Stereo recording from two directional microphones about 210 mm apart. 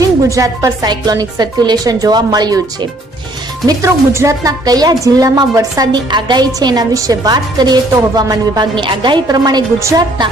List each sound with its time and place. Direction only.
0.0 s a woman's voice: 15° right (ahead or behind)
3.7 s a woman's voice: 15° right (ahead or behind)